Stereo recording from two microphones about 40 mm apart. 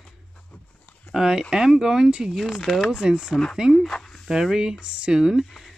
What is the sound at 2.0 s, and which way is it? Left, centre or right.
Speech, right.